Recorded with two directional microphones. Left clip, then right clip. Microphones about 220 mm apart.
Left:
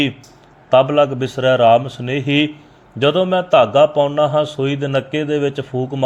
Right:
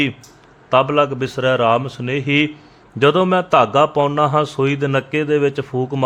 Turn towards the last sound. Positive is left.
turn(degrees=-10)  # may be behind; listen again after turning